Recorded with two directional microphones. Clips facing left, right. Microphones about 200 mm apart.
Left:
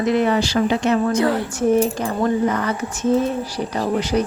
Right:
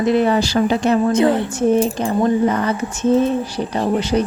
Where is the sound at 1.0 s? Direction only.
20° right (ahead or behind).